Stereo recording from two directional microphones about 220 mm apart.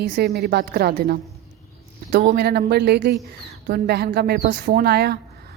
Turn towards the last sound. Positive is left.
turn(degrees=-45)  # may be behind; listen again after turning